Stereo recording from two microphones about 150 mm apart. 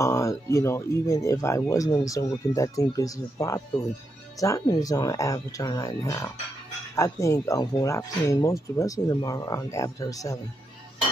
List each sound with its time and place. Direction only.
0.0 s speech: 20° left (ahead or behind)